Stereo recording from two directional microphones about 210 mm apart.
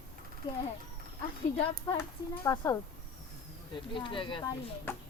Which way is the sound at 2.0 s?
15° left (ahead or behind).